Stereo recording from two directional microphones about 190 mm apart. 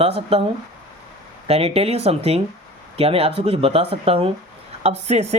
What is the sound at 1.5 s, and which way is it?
Speech, 30° right (ahead or behind).